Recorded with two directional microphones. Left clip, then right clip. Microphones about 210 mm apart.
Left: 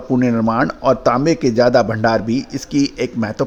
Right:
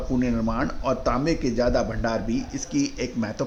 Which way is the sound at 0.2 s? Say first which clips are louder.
Left 10 dB; 40° left (ahead or behind).